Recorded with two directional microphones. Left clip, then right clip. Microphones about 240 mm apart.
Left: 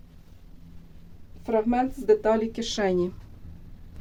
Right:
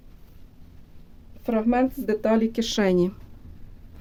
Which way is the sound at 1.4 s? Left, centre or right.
Right.